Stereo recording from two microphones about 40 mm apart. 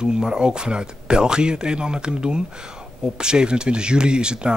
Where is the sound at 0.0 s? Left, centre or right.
Centre.